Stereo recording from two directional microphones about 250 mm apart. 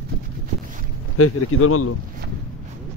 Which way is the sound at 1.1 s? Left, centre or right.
Left.